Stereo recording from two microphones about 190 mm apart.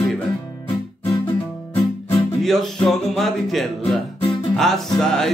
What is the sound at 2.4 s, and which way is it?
Music, centre (ahead or behind).